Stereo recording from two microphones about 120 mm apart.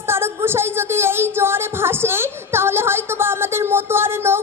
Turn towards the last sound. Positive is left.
turn(degrees=-20)  # may be behind; listen again after turning